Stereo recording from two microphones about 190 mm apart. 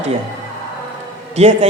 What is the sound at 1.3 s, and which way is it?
Speech, 35° right (ahead or behind).